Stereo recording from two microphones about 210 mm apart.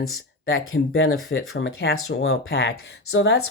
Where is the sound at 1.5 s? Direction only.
60° left (ahead or behind).